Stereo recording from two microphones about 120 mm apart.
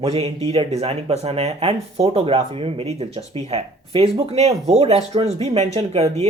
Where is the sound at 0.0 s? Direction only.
60° right (ahead or behind).